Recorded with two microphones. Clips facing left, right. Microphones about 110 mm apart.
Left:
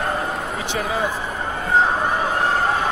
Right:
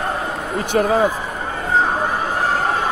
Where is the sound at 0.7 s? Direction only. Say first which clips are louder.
Right 8 dB; 45° right (ahead or behind).